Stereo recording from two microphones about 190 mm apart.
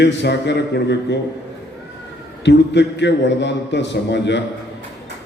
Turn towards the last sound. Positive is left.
turn(degrees=65)  # may be behind; listen again after turning